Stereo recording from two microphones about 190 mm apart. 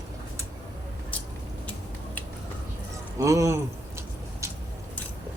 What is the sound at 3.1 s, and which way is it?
Speech, 15° right (ahead or behind).